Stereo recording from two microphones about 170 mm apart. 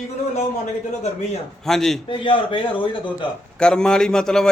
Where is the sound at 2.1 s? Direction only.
30° left (ahead or behind).